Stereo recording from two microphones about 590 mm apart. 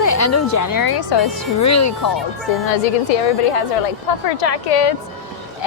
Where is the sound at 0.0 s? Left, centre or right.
Left.